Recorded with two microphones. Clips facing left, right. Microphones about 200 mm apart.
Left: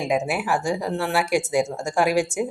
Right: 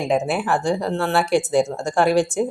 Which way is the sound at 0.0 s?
10° left (ahead or behind).